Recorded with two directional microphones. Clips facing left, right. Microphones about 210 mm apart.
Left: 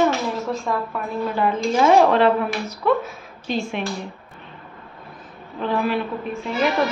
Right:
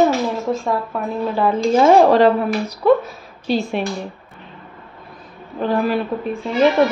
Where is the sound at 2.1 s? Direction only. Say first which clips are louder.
Right 4 dB; 40° right (ahead or behind).